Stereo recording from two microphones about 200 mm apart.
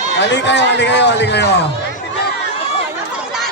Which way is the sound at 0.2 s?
60° left (ahead or behind).